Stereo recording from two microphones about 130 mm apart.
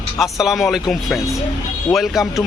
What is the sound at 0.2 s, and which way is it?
Speech, centre (ahead or behind).